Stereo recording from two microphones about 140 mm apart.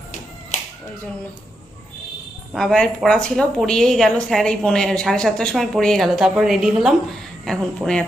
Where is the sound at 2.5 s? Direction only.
5° left (ahead or behind).